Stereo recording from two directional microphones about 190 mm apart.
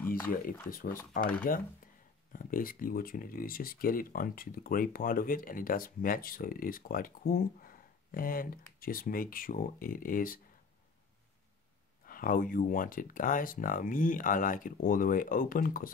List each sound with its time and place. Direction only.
1.1 s speech: 45° left (ahead or behind)
12.1 s speech: 45° left (ahead or behind)